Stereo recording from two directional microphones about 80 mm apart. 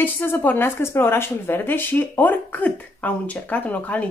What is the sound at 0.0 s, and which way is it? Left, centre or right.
A woman's voice, left.